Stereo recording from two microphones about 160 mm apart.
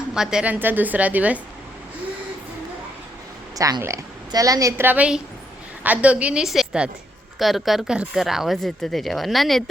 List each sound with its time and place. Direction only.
0.1 s a woman's voice: 5° right (ahead or behind)
3.5 s a woman's voice: 20° right (ahead or behind); by 9.6 s centre (ahead or behind)